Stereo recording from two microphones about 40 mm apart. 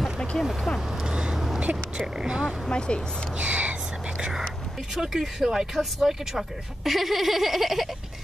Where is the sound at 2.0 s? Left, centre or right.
Centre.